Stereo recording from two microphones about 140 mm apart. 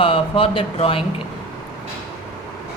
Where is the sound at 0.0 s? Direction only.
40° left (ahead or behind).